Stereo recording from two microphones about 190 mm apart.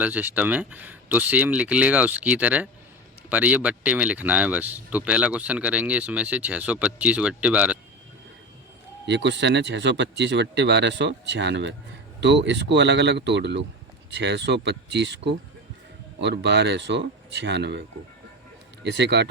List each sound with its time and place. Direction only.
0.0 s speech: 10° right (ahead or behind)
9.0 s speech: 70° right (ahead or behind)
18.9 s speech: 65° right (ahead or behind)